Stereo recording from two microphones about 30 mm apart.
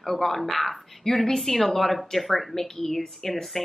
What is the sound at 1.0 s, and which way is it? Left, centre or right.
Speech, centre.